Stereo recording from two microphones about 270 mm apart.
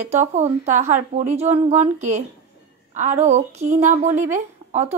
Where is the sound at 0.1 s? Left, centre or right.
Right.